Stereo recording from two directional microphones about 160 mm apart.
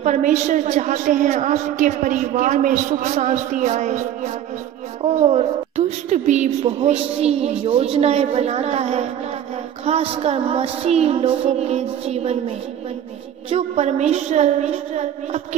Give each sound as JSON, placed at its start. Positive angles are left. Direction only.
{"t": 0.0, "sound": "a woman's voice", "side_deg": -50}